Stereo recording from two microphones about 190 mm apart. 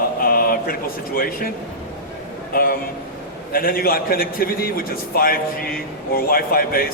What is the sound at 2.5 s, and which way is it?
A man's voice, 50° left (ahead or behind).